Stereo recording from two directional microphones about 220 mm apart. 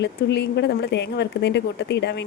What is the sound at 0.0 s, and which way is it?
A woman's voice, 50° left (ahead or behind).